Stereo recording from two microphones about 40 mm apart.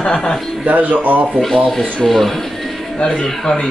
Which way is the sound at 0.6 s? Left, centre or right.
Right.